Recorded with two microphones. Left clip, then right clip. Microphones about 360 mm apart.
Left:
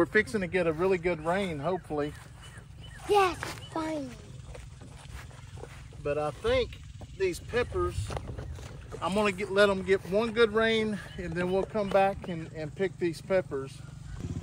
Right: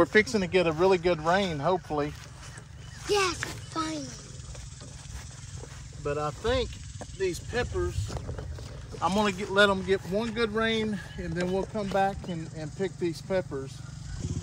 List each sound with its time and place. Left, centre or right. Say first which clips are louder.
0.0 s speech: right 3 dB; centre
3.1 s speech: left 2 dB; centre
6.0 s speech: even; centre
9.0 s speech: right 2 dB; centre